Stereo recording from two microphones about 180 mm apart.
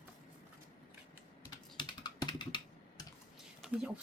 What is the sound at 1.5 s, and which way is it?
Typing, 25° left (ahead or behind).